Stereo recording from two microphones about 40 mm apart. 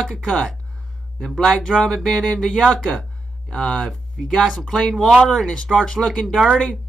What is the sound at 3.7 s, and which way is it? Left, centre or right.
Speech, centre.